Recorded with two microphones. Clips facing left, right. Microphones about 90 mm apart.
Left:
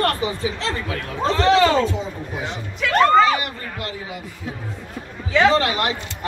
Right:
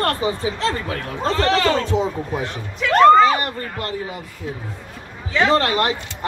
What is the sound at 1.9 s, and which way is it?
Speech, 65° right (ahead or behind).